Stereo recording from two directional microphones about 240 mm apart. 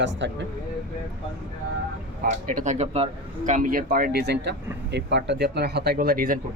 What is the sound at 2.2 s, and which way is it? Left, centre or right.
Speech, right.